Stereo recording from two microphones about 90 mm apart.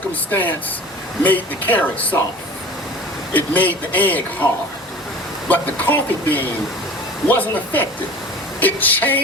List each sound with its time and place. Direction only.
0.3 s speech: 20° left (ahead or behind)
3.3 s speech: 20° left (ahead or behind)
5.5 s speech: 20° left (ahead or behind)